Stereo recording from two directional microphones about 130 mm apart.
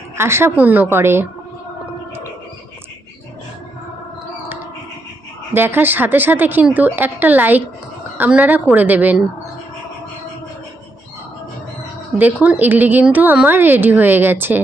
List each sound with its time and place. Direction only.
0.2 s a woman's voice: 20° right (ahead or behind)
5.5 s a woman's voice: 15° right (ahead or behind)
12.1 s a woman's voice: 10° right (ahead or behind)